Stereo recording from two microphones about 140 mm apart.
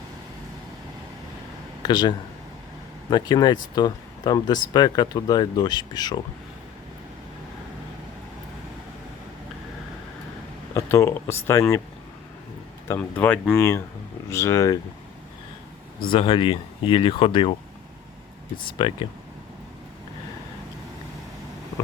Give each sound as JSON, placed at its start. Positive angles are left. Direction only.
{"t": 1.8, "sound": "speech", "side_deg": 30}
{"t": 10.8, "sound": "speech", "side_deg": 20}
{"t": 13.0, "sound": "speech", "side_deg": 10}
{"t": 16.1, "sound": "speech", "side_deg": 35}
{"t": 18.8, "sound": "speech", "side_deg": 35}